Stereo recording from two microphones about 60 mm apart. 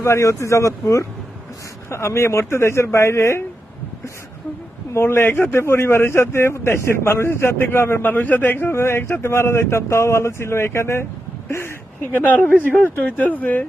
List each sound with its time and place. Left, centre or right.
0.0 s a man's voice: left
4.9 s a man's voice: left
8.0 s a man's voice: left
11.4 s a sound: left
12.2 s speech: left
12.5 s speech: right
13.0 s speech: left